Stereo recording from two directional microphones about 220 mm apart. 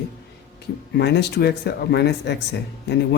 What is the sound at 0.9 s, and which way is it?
Speech, 50° left (ahead or behind).